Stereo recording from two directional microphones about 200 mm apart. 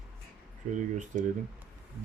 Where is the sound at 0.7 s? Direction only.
40° right (ahead or behind).